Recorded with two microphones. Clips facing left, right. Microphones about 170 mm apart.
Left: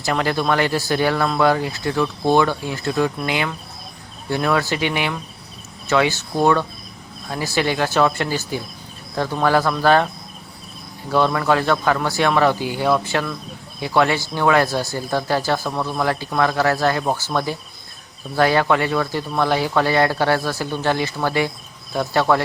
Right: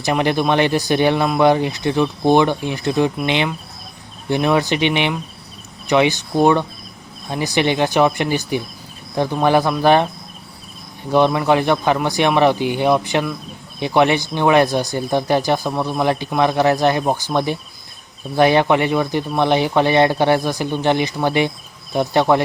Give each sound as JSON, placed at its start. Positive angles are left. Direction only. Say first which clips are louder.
{"t": 0.0, "sound": "speech", "louder": "right 3 dB", "side_deg": -20}
{"t": 11.1, "sound": "speech", "louder": "right 3 dB", "side_deg": -20}